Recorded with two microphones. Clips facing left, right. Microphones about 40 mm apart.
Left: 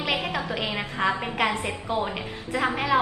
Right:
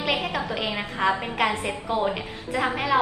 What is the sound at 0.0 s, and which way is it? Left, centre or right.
A woman's voice, centre.